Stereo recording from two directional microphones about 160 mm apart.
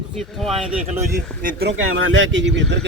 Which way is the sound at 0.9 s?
55° right (ahead or behind).